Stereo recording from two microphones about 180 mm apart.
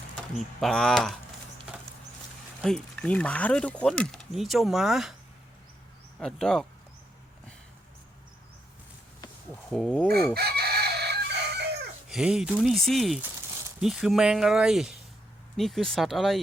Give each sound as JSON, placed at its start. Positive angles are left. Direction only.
{"t": 0.3, "sound": "speech", "side_deg": 0}
{"t": 2.6, "sound": "speech", "side_deg": 5}
{"t": 6.1, "sound": "speech", "side_deg": 5}
{"t": 9.6, "sound": "speech", "side_deg": 0}
{"t": 10.3, "sound": "chicken", "side_deg": -60}
{"t": 12.0, "sound": "speech", "side_deg": -5}